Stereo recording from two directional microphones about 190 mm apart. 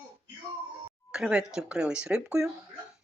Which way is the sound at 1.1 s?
5° right (ahead or behind).